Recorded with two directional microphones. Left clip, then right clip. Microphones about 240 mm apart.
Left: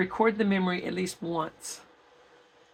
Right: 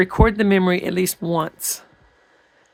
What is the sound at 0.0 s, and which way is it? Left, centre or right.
Speech, right.